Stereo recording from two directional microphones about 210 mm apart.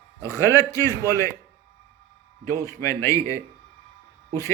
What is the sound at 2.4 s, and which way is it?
A man's voice, 15° left (ahead or behind).